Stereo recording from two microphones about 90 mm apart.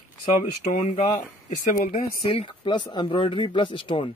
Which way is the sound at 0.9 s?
80° left.